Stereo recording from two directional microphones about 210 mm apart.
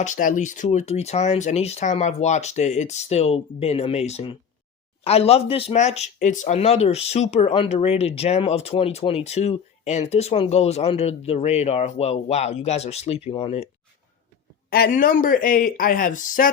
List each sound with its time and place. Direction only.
0.0 s speech: 40° left (ahead or behind)
14.7 s speech: 45° left (ahead or behind)